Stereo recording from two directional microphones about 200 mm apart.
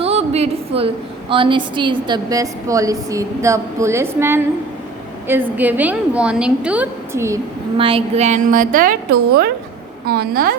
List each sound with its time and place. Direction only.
0.0 s a sound: 30° right (ahead or behind)
1.3 s a woman's voice: 25° right (ahead or behind)
7.8 s a woman's voice: 25° right (ahead or behind); by 10.5 s 50° right (ahead or behind)